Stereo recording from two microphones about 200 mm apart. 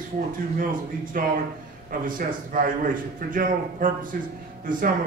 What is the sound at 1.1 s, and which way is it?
A man's voice, 45° right (ahead or behind).